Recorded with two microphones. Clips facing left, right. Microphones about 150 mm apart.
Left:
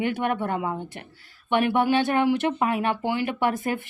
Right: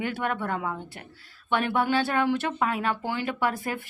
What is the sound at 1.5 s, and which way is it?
Speech, 15° left (ahead or behind).